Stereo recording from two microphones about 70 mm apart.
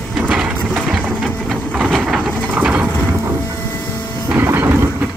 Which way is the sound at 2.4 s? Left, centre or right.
Right.